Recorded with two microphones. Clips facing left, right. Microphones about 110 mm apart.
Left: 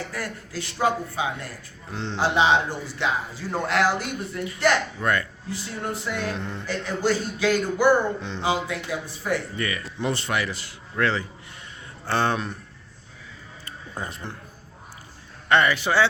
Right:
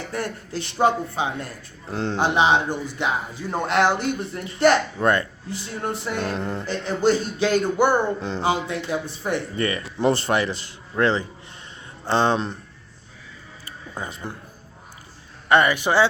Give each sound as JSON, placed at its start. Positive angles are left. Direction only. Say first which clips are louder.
{"t": 0.1, "sound": "speech", "louder": "right 4 dB", "side_deg": -25}
{"t": 1.9, "sound": "speech", "louder": "right 5 dB", "side_deg": -45}
{"t": 2.2, "sound": "speech", "louder": "right 1 dB", "side_deg": -15}
{"t": 6.1, "sound": "music", "louder": "right 3 dB", "side_deg": -45}
{"t": 6.7, "sound": "speech", "louder": "right 3 dB", "side_deg": -25}
{"t": 13.9, "sound": "a man's voice", "louder": "right 1 dB", "side_deg": 0}
{"t": 15.4, "sound": "speech", "louder": "right 2 dB", "side_deg": -15}